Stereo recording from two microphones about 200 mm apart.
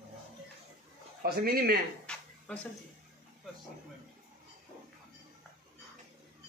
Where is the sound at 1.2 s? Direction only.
50° right (ahead or behind).